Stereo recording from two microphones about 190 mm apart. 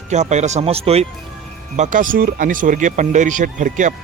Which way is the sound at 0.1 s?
35° right (ahead or behind).